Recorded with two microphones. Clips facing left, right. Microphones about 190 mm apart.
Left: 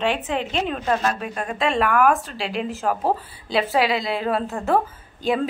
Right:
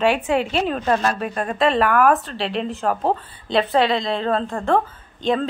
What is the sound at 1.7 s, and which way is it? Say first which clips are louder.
Speech: even; centre (ahead or behind).